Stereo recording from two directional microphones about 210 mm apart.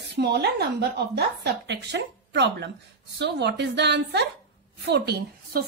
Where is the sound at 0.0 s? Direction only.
55° right (ahead or behind).